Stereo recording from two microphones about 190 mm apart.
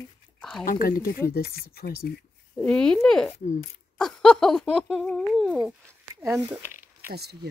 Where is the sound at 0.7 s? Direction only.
50° left (ahead or behind).